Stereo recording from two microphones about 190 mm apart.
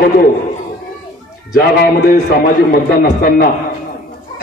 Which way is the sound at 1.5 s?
55° left (ahead or behind).